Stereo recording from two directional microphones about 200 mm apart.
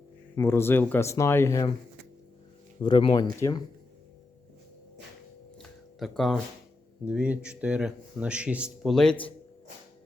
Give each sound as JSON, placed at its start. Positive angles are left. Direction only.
{"t": 0.3, "sound": "speech", "side_deg": 10}
{"t": 2.8, "sound": "speech", "side_deg": 20}
{"t": 6.0, "sound": "speech", "side_deg": 0}